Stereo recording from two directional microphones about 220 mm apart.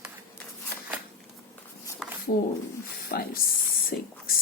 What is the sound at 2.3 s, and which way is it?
Speech, 40° left (ahead or behind).